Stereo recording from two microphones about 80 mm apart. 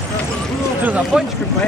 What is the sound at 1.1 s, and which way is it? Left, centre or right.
Speech, centre.